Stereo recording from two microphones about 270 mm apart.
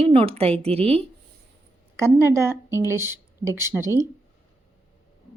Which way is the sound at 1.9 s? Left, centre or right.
Centre.